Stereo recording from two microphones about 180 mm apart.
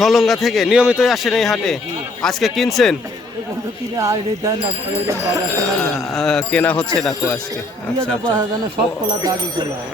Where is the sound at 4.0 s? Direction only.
20° right (ahead or behind).